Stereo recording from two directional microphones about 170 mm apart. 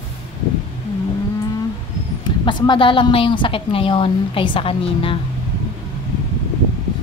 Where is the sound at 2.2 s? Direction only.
25° left (ahead or behind).